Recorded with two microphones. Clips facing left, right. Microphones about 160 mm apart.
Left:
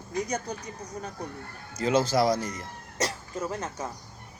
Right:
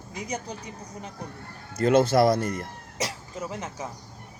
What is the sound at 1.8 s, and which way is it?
Speech, 55° right (ahead or behind).